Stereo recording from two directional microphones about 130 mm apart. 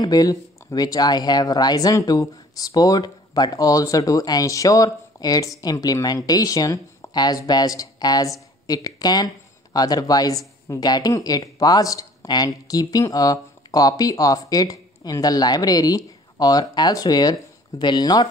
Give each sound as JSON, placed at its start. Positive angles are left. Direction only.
{"t": 0.0, "sound": "speech", "side_deg": 30}